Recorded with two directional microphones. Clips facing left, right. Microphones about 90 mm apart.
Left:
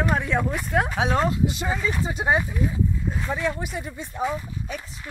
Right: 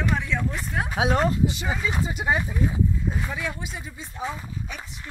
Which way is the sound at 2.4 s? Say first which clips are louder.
Even; 20° right (ahead or behind).